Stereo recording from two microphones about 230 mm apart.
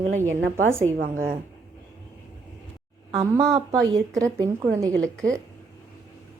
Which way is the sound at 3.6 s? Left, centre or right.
Centre.